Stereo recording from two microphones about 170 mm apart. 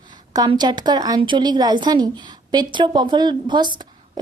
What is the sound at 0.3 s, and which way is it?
A woman's voice, 25° right (ahead or behind).